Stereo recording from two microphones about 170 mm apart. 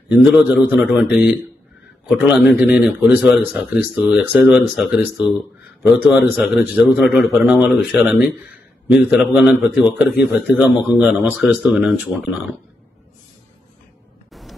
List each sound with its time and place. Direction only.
0.1 s a man's voice: 10° right (ahead or behind)
6.3 s a man's voice: 5° right (ahead or behind)